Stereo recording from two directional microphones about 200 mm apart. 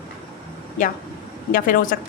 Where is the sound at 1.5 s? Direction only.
45° left (ahead or behind).